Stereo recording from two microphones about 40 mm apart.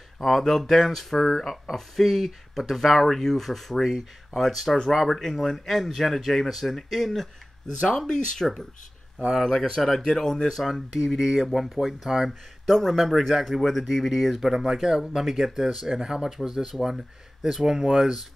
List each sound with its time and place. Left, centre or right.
0.2 s speech: centre
8.4 s speech: centre
10.6 s speech: centre